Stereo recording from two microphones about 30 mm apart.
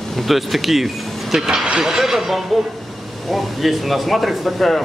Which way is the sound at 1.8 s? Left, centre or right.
Centre.